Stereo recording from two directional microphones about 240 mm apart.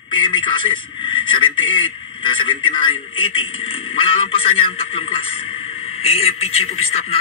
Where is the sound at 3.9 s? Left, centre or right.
Left.